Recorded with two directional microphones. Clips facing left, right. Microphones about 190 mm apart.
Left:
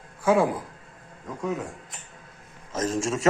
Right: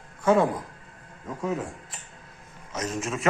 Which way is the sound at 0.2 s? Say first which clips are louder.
Even; 10° left (ahead or behind).